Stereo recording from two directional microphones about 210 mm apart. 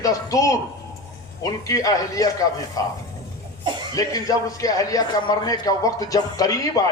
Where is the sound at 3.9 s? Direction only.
15° left (ahead or behind).